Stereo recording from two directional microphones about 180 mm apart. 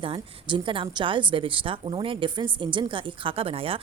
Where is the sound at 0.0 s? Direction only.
30° right (ahead or behind).